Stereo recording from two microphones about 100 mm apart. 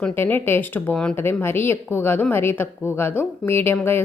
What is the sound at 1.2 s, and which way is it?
A woman's voice, 20° left (ahead or behind).